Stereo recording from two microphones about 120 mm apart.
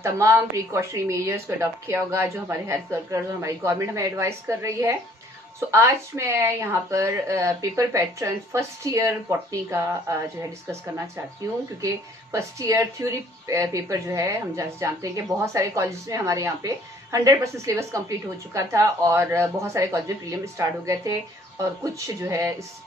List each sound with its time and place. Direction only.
0.0 s a woman's voice: 25° right (ahead or behind)
11.8 s a woman's voice: 25° right (ahead or behind)